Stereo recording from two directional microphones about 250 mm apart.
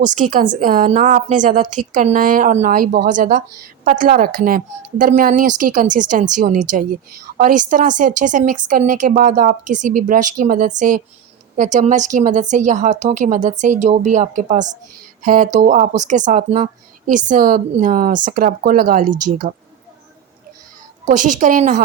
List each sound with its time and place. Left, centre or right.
0.1 s a woman's voice: right
21.1 s a woman's voice: right